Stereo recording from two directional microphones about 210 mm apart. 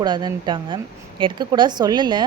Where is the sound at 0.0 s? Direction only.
20° right (ahead or behind).